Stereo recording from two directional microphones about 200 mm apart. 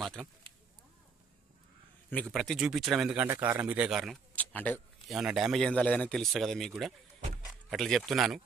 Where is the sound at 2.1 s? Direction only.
5° left (ahead or behind).